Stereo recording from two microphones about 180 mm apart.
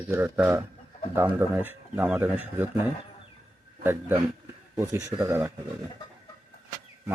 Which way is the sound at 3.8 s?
15° right (ahead or behind).